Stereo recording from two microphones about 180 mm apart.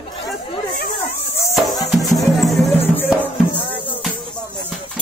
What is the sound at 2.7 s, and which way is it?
Music, 10° left (ahead or behind).